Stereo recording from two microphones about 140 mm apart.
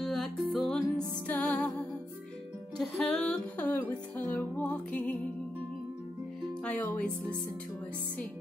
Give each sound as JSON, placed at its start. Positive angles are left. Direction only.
{"t": 0.0, "sound": "music", "side_deg": 0}
{"t": 2.8, "sound": "a sound", "side_deg": 5}
{"t": 4.2, "sound": "music", "side_deg": 10}
{"t": 6.6, "sound": "music", "side_deg": 10}